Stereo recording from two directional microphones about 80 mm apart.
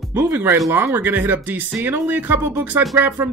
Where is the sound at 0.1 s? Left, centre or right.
Right.